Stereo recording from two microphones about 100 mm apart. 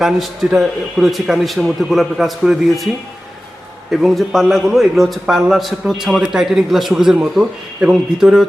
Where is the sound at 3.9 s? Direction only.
Centre (ahead or behind).